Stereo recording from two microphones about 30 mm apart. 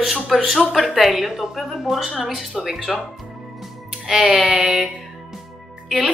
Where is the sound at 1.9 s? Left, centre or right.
Centre.